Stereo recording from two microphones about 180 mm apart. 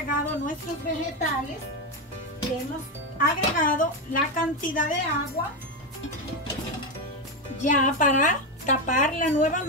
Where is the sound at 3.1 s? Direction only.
50° left (ahead or behind).